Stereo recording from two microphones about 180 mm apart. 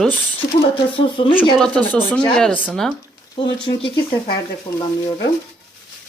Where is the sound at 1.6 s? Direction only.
5° left (ahead or behind).